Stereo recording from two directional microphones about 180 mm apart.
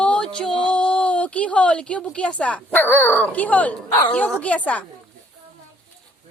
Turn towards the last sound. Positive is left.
turn(degrees=10)  # may be behind; listen again after turning